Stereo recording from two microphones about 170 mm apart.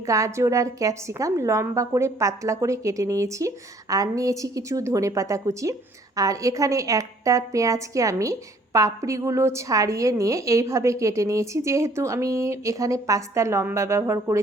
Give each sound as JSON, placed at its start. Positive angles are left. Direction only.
{"t": 0.0, "sound": "a woman's voice", "side_deg": -20}